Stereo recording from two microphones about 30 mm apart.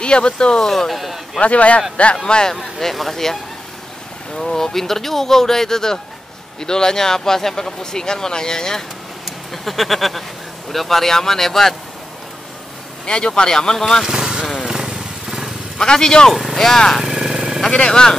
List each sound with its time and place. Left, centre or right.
0.0 s speech: left
0.7 s speech: centre
1.4 s a man's voice: left
2.2 s speech: left
2.5 s speech: centre
4.4 s speech: centre
9.2 s speech: centre
13.0 s speech: left
14.0 s a sound: right
14.6 s vehicle: centre
15.8 s speech: centre
17.0 s a sound: centre
17.6 s speech: left